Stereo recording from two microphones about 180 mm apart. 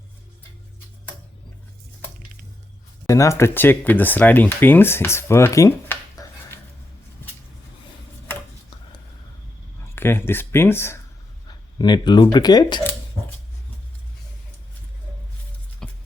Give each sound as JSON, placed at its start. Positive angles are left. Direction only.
{"t": 3.1, "sound": "speech", "side_deg": 15}
{"t": 9.9, "sound": "speech", "side_deg": 15}
{"t": 11.4, "sound": "speech", "side_deg": 25}
{"t": 15.8, "sound": "a sound", "side_deg": 5}